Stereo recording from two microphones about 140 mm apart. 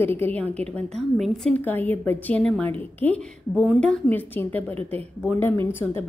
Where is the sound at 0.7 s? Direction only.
Centre (ahead or behind).